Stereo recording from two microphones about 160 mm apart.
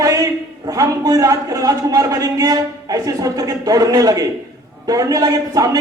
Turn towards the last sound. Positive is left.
turn(degrees=-20)  # may be behind; listen again after turning